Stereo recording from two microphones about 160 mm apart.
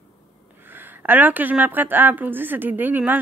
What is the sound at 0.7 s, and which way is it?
A woman's voice, 10° right (ahead or behind).